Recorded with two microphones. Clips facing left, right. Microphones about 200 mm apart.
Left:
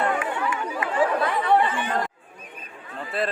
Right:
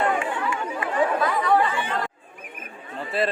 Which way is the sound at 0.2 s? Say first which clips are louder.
Even; 30° right (ahead or behind).